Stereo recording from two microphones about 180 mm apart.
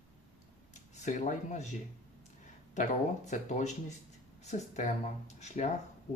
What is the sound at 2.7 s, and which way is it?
Speech, 45° left (ahead or behind).